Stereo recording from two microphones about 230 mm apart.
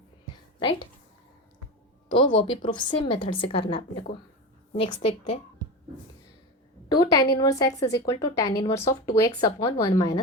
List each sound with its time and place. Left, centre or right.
2.0 s a woman's voice: left
7.0 s speech: centre